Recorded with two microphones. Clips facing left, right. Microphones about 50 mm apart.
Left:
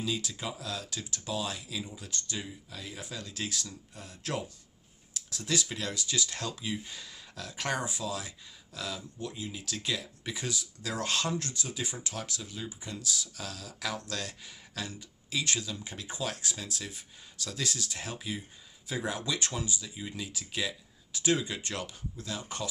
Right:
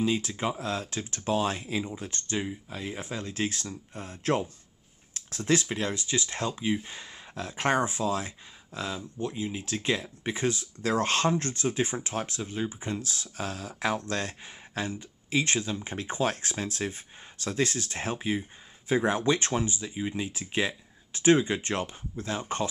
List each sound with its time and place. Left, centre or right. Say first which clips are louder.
0.0 s speech: right 7 dB; right